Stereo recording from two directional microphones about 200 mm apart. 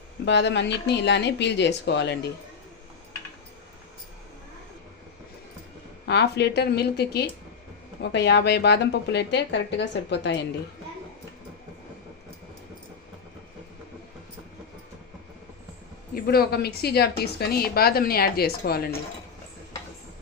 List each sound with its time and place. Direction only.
0.3 s a woman's voice: 60° left (ahead or behind)
6.1 s a woman's voice: 55° left (ahead or behind)
16.1 s speech: 50° left (ahead or behind)